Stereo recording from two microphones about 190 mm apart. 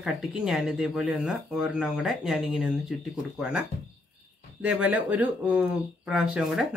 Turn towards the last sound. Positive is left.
turn(degrees=0)  # may be behind; listen again after turning